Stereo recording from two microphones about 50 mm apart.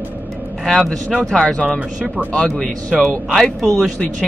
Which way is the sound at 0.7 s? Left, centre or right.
Centre.